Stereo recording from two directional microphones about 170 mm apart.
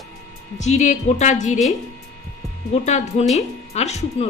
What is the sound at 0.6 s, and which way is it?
A woman's voice, 45° left (ahead or behind).